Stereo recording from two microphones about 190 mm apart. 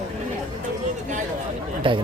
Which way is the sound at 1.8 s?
25° right (ahead or behind).